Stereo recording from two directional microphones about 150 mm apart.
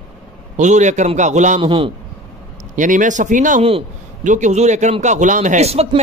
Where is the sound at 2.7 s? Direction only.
60° right (ahead or behind).